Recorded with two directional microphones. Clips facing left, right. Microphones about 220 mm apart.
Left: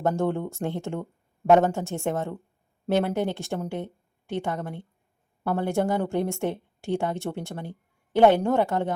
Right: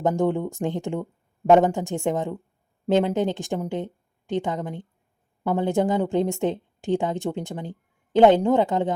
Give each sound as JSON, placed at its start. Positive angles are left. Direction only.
{"t": 0.0, "sound": "a woman's voice", "side_deg": -15}